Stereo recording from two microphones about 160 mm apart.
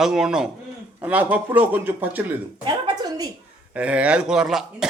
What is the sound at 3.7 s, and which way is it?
A man's voice, 10° right (ahead or behind).